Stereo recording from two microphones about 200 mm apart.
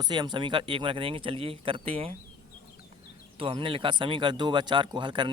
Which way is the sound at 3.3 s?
25° right (ahead or behind).